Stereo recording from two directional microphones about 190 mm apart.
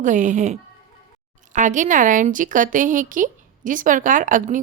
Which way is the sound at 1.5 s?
40° right (ahead or behind).